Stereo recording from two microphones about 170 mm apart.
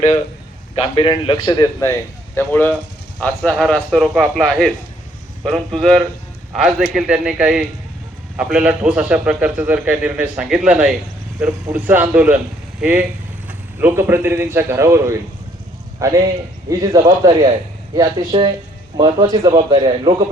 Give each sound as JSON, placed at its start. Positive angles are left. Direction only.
{"t": 0.8, "sound": "a man's voice", "side_deg": 30}
{"t": 2.3, "sound": "a man's voice", "side_deg": 10}